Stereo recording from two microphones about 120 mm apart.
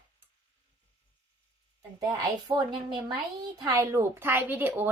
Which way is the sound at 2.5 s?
40° right (ahead or behind).